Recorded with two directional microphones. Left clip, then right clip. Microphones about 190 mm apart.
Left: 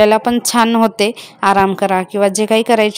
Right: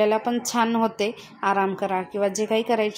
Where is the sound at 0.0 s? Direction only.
50° left (ahead or behind).